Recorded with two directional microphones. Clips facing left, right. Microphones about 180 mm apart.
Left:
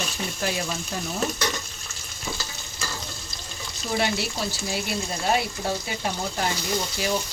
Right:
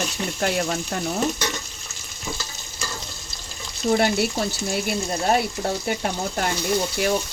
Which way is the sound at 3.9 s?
50° right (ahead or behind).